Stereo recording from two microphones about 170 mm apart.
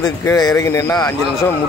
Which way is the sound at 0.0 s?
20° left (ahead or behind).